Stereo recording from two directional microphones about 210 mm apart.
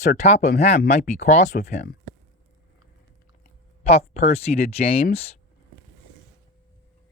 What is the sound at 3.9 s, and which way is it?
Speech, 30° left (ahead or behind).